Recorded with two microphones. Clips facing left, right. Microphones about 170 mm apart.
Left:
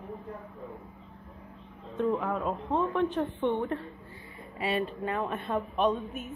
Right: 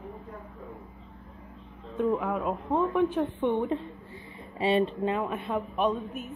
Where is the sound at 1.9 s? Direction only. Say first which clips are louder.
Right 2 dB; 5° right (ahead or behind).